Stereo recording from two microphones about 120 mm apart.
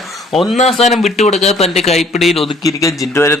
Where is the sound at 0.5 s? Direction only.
70° left (ahead or behind).